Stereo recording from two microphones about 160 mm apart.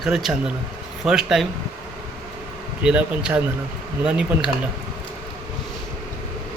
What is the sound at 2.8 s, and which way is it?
Speech, 5° right (ahead or behind).